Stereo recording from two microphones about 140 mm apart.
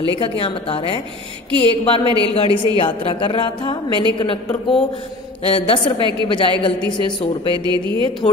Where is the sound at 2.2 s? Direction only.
40° left (ahead or behind).